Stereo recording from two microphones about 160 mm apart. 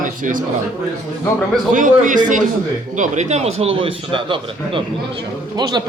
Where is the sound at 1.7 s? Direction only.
55° right (ahead or behind); by 5.8 s 25° right (ahead or behind).